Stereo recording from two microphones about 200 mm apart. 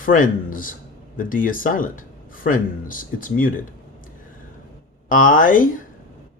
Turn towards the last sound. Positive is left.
turn(degrees=40)  # may be behind; listen again after turning